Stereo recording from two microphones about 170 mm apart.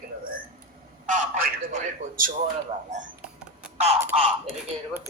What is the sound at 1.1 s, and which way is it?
A man's voice, 50° right (ahead or behind).